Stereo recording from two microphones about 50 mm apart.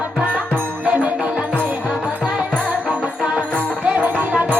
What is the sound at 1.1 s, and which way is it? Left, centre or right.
Music, right.